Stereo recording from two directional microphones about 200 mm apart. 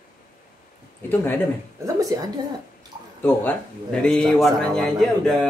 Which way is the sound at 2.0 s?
15° right (ahead or behind).